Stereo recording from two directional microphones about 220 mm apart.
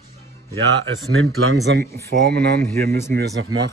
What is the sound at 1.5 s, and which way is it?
Speech, 50° right (ahead or behind).